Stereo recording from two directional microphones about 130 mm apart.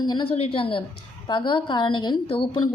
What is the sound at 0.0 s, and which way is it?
A woman's voice, 35° left (ahead or behind).